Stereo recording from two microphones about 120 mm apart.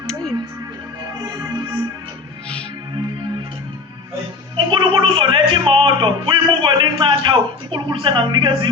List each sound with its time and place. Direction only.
0.1 s music: 5° left (ahead or behind)
1.2 s music: 30° right (ahead or behind)
4.5 s a sound: 40° right (ahead or behind)